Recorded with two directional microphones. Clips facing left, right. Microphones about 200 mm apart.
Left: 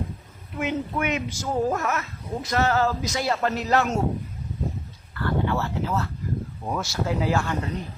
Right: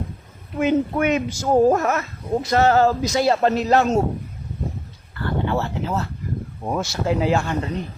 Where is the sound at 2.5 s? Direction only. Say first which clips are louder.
Right 6 dB; 30° right (ahead or behind).